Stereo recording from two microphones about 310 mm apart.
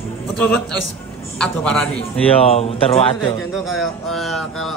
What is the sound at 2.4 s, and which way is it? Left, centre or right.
Speech, centre.